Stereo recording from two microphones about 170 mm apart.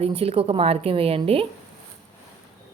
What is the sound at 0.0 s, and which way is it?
A woman's voice, 35° right (ahead or behind).